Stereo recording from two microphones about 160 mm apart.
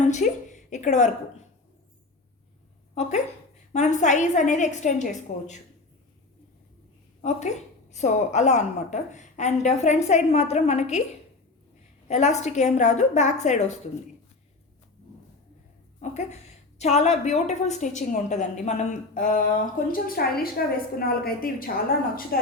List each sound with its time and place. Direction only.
0.0 s a woman's voice: 50° left (ahead or behind)
2.9 s a woman's voice: 45° left (ahead or behind)
7.2 s a woman's voice: 45° left (ahead or behind)
12.0 s a woman's voice: 45° left (ahead or behind)
16.0 s a woman's voice: 45° left (ahead or behind); by 22.5 s 70° left (ahead or behind)